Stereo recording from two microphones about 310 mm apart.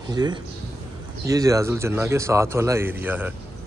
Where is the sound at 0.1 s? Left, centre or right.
Centre.